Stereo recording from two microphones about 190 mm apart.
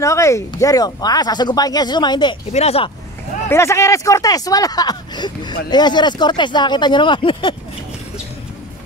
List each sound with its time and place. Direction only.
0.0 s speech: 15° left (ahead or behind); by 2.9 s 35° left (ahead or behind)
3.4 s speech: 15° left (ahead or behind)